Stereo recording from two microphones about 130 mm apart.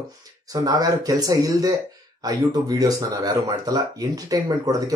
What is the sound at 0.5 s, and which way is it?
Speech, 30° right (ahead or behind).